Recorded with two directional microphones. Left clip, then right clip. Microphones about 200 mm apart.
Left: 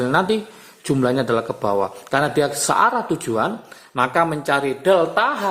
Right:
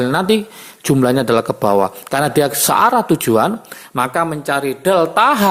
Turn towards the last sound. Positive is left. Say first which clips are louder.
# right 6 dB
turn(degrees=-40)  # may be behind; listen again after turning